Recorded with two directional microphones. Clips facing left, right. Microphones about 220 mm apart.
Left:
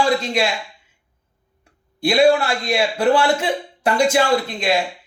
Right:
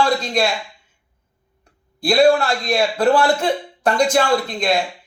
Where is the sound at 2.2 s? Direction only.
10° left (ahead or behind).